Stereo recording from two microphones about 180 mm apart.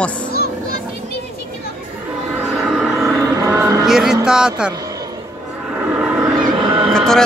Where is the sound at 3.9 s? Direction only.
Centre (ahead or behind).